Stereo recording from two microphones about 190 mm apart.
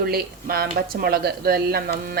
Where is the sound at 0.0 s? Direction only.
50° right (ahead or behind).